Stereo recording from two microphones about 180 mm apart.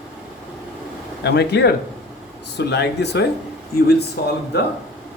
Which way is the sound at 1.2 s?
65° left (ahead or behind).